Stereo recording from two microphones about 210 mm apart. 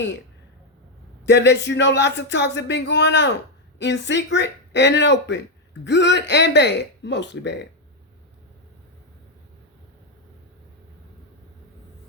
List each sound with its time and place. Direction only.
1.2 s speech: 55° left (ahead or behind)